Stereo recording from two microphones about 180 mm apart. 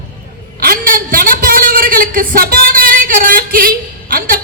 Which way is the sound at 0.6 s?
55° right (ahead or behind).